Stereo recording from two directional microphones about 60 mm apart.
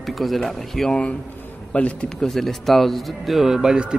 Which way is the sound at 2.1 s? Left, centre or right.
Centre.